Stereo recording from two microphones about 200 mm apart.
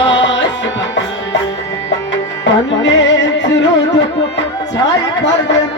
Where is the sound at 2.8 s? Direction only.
65° left (ahead or behind).